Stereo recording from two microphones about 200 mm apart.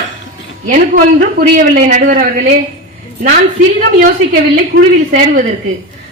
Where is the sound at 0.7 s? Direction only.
45° right (ahead or behind).